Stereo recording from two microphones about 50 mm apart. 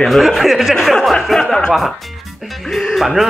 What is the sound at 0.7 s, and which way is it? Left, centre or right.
Speech, centre.